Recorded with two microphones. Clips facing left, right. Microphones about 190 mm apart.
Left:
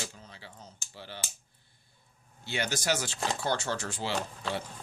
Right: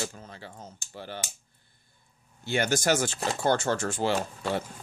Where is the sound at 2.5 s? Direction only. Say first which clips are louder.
Right 6 dB; 50° right (ahead or behind).